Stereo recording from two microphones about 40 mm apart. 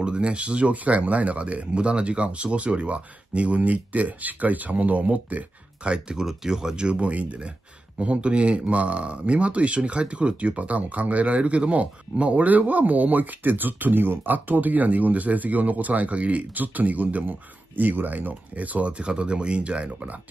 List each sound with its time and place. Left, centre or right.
0.0 s speech: right
5.9 s speech: right